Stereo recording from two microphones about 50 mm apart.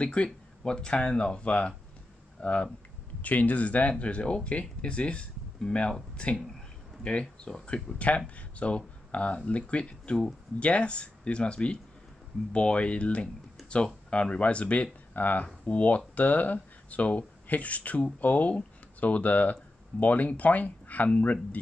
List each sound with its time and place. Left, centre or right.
0.0 s speech: left